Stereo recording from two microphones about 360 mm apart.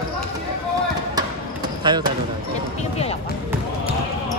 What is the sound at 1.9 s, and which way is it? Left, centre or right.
Speech, centre.